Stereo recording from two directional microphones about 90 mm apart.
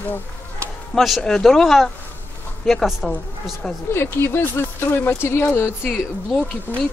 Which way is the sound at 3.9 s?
25° left (ahead or behind).